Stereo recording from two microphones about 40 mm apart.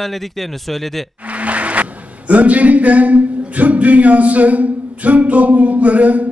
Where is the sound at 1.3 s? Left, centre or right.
Right.